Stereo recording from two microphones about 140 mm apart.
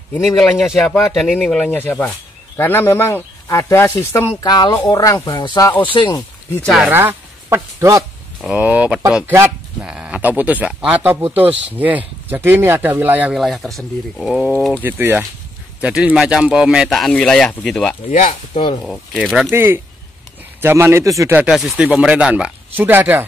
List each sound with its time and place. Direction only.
0.4 s speech: centre (ahead or behind)
1.8 s speech: 15° left (ahead or behind)
4.4 s speech: 30° left (ahead or behind)
6.6 s speech: centre (ahead or behind)
6.9 s speech: 15° right (ahead or behind)
8.5 s speech: 10° right (ahead or behind)
14.8 s speech: 15° right (ahead or behind); by 17.9 s 5° left (ahead or behind)
18.1 s speech: 60° left (ahead or behind)
18.9 s speech: centre (ahead or behind)
19.5 s speech: 15° right (ahead or behind)
21.5 s speech: centre (ahead or behind)